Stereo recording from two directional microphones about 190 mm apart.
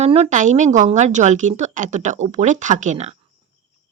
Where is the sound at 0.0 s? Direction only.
35° right (ahead or behind).